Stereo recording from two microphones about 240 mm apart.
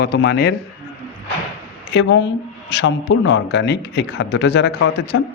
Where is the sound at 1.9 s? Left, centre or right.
Left.